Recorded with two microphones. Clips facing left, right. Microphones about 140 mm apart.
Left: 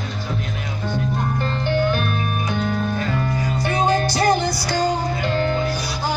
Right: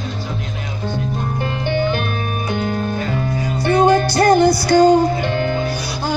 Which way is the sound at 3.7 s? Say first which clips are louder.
Right 7 dB; 65° right (ahead or behind).